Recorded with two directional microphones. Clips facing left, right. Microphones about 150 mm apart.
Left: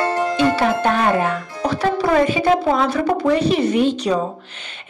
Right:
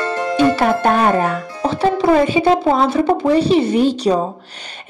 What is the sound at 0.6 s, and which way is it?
Music, 40° right (ahead or behind).